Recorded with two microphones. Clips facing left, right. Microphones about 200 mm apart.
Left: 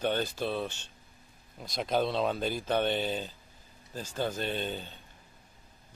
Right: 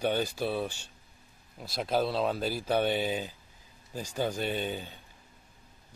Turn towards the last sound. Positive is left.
turn(degrees=-10)  # may be behind; listen again after turning